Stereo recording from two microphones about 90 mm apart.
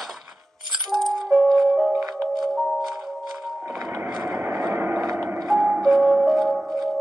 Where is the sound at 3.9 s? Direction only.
25° right (ahead or behind).